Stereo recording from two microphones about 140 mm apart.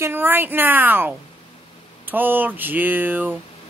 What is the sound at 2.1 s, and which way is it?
Speech, 15° right (ahead or behind).